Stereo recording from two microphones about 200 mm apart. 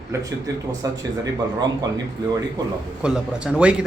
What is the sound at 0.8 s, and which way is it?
Speech, 20° right (ahead or behind).